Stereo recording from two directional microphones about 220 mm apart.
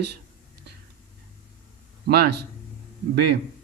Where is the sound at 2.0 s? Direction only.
45° right (ahead or behind).